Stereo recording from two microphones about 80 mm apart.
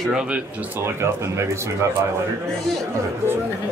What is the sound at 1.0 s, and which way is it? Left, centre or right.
Speech, right.